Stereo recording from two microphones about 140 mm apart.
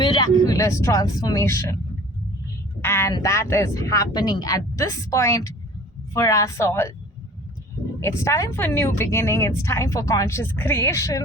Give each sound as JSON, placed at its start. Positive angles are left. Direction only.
{"t": 0.0, "sound": "speech", "side_deg": 30}
{"t": 2.8, "sound": "speech", "side_deg": 20}
{"t": 8.0, "sound": "speech", "side_deg": 20}